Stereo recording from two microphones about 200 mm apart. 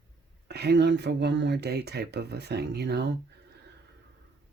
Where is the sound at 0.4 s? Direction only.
55° right (ahead or behind).